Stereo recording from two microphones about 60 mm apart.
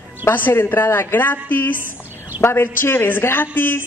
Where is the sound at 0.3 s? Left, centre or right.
Left.